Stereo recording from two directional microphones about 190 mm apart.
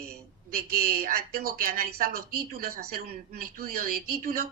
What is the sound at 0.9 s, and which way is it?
Speech, 50° right (ahead or behind).